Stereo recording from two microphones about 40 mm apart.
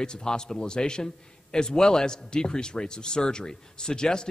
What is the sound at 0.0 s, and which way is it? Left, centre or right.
A man's voice, left.